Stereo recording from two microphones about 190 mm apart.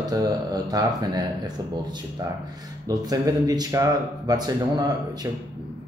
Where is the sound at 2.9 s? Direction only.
20° right (ahead or behind).